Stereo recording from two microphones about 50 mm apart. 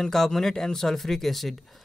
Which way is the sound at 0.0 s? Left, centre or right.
Centre.